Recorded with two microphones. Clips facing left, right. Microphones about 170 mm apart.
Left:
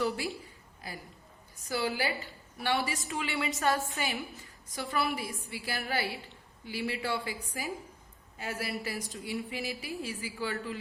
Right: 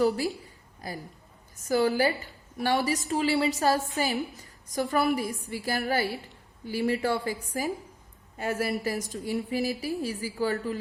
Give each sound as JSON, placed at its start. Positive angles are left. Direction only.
{"t": 0.8, "sound": "a woman's voice", "side_deg": -40}